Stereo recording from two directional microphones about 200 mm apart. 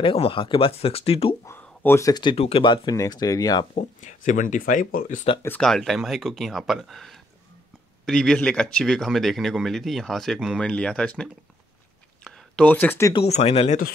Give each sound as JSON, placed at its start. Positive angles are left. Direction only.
{"t": 0.0, "sound": "speech", "side_deg": 25}
{"t": 1.4, "sound": "speech", "side_deg": 10}
{"t": 3.7, "sound": "speech", "side_deg": 40}
{"t": 5.4, "sound": "speech", "side_deg": 5}
{"t": 12.2, "sound": "a sound", "side_deg": 5}
{"t": 13.1, "sound": "speech", "side_deg": 30}